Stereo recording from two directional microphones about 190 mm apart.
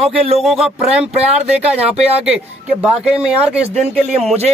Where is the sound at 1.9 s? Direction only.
35° right (ahead or behind).